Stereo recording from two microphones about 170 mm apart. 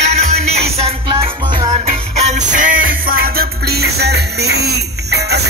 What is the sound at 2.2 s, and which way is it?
Music, 45° right (ahead or behind).